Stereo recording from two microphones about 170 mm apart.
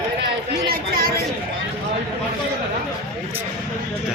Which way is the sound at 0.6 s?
60° right (ahead or behind).